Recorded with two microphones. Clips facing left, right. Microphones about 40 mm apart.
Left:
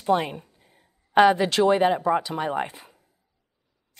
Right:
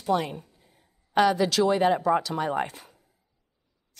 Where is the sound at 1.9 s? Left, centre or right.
Centre.